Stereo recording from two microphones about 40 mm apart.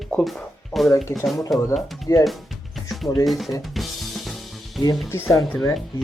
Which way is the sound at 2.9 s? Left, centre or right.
Centre.